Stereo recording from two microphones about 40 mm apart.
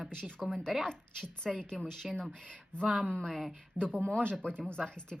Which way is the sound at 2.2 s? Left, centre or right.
Left.